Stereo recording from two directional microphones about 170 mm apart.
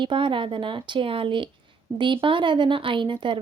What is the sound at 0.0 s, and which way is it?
A woman's voice, 30° right (ahead or behind).